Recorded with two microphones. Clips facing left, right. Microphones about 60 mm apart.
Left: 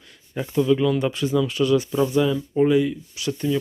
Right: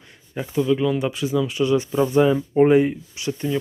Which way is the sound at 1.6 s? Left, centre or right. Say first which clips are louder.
Right 1 dB; right.